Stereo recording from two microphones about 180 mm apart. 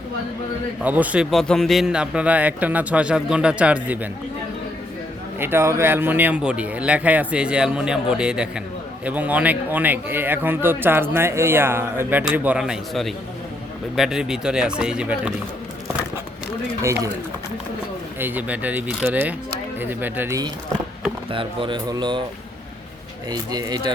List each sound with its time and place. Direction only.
0.8 s a man's voice: 10° right (ahead or behind)
5.4 s a man's voice: 15° right (ahead or behind)
16.8 s a man's voice: 15° right (ahead or behind)
18.2 s a man's voice: 10° right (ahead or behind)
21.3 s speech: 25° right (ahead or behind)
23.3 s speech: 20° right (ahead or behind)